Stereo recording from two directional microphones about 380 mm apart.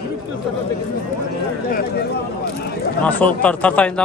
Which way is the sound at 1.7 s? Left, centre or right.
Left.